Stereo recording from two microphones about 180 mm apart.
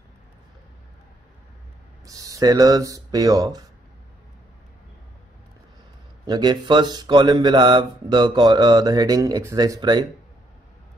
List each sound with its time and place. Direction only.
2.0 s mantra: 20° right (ahead or behind)
6.2 s mantra: 25° right (ahead or behind)